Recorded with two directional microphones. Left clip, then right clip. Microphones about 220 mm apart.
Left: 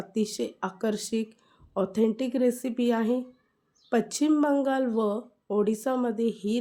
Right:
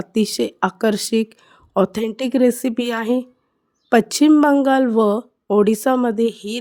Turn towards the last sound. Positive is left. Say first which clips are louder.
# right 9 dB
turn(degrees=-45)  # may be behind; listen again after turning